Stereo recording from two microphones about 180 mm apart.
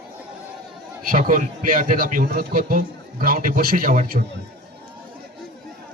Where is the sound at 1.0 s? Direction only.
50° right (ahead or behind).